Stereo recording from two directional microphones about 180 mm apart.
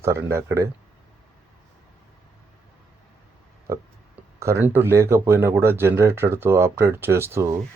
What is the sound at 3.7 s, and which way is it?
Speech, 15° right (ahead or behind).